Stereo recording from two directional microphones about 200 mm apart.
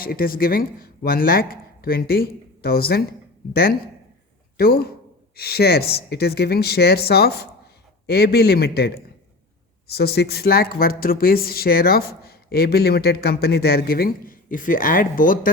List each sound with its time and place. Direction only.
0.0 s speech: 45° left (ahead or behind)
9.9 s speech: 55° left (ahead or behind)